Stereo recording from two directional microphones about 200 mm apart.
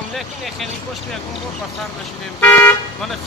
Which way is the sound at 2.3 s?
10° left (ahead or behind).